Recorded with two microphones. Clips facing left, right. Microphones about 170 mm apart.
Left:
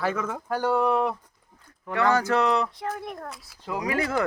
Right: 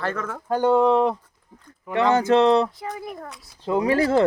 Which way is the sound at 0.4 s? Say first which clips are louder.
Right 6 dB; 20° right (ahead or behind).